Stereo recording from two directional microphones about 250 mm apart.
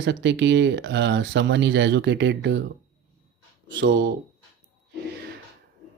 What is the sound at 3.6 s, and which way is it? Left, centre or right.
Speech, right.